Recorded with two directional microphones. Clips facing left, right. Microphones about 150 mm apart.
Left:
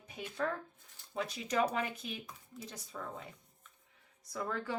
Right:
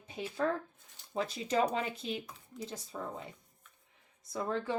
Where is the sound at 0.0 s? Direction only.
25° right (ahead or behind).